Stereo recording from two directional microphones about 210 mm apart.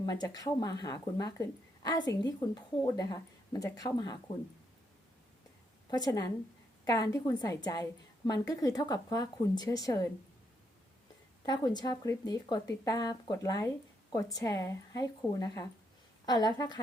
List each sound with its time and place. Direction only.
0.0 s speech: 20° left (ahead or behind)
5.9 s speech: 15° left (ahead or behind)
11.4 s a woman's voice: 20° left (ahead or behind)